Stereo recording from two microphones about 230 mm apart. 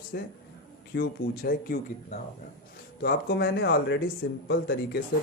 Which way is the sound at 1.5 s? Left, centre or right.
Left.